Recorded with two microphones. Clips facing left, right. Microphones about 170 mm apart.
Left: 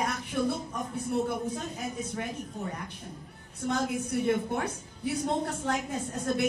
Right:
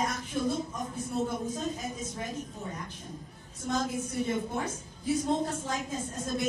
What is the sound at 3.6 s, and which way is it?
A woman's voice, 65° left (ahead or behind).